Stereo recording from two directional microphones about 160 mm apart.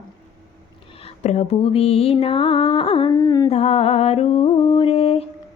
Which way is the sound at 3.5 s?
40° left (ahead or behind).